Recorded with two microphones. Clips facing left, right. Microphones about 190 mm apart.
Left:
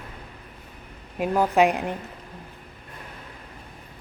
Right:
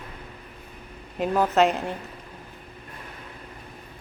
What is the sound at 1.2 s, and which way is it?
Speech, 10° left (ahead or behind).